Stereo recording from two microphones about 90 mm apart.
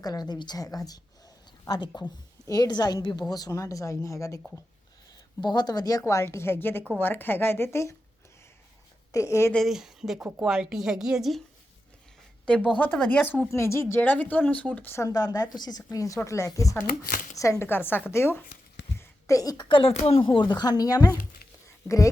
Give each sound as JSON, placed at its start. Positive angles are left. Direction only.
{"t": 0.0, "sound": "a woman's voice", "side_deg": 45}
{"t": 5.4, "sound": "a woman's voice", "side_deg": 55}
{"t": 9.1, "sound": "a woman's voice", "side_deg": 35}
{"t": 9.6, "sound": "a woman's voice", "side_deg": -5}
{"t": 12.7, "sound": "speech", "side_deg": 20}
{"t": 13.5, "sound": "speech", "side_deg": 30}
{"t": 14.8, "sound": "speech", "side_deg": 30}
{"t": 15.1, "sound": "a woman's voice", "side_deg": 45}
{"t": 17.7, "sound": "speech", "side_deg": 25}
{"t": 18.9, "sound": "a sound", "side_deg": 40}
{"t": 19.6, "sound": "a woman's voice", "side_deg": 80}